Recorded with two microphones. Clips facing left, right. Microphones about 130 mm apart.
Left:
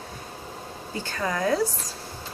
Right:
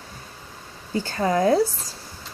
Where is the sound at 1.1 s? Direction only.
30° right (ahead or behind).